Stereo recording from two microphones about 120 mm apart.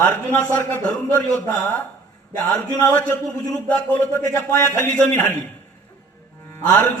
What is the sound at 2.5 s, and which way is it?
A man's voice, 10° left (ahead or behind).